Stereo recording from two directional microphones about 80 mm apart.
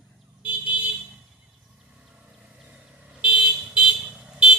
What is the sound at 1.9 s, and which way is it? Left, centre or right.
Vehicle, centre.